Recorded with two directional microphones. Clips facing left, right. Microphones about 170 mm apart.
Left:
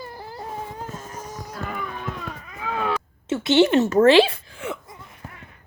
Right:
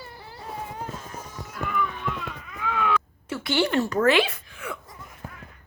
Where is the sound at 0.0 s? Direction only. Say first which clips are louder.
Left 5 dB; 40° left (ahead or behind).